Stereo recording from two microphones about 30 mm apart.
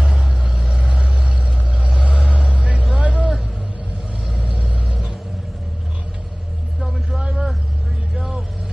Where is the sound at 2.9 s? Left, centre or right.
Right.